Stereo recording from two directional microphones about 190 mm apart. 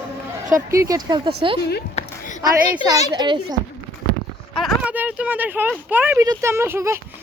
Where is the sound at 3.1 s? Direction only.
25° right (ahead or behind).